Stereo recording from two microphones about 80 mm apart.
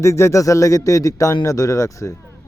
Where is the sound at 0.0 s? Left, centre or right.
Left.